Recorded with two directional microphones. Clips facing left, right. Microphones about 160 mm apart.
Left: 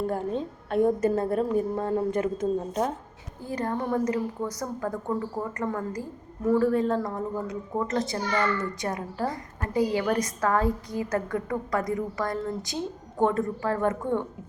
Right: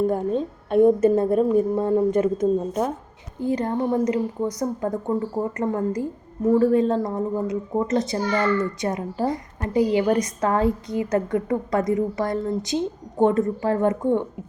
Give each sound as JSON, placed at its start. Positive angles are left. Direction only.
{"t": 0.1, "sound": "a woman's voice", "side_deg": -20}